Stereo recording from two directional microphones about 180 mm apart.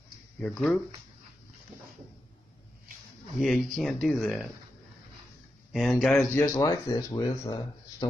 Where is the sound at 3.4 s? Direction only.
Centre (ahead or behind).